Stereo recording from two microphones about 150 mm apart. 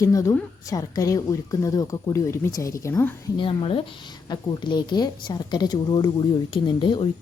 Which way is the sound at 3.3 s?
35° left (ahead or behind).